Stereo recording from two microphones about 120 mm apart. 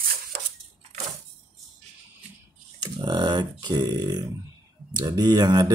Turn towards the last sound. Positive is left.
turn(degrees=-35)  # may be behind; listen again after turning